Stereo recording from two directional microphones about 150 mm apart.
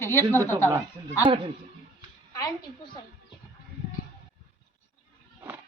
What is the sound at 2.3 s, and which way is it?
Speech, 30° left (ahead or behind).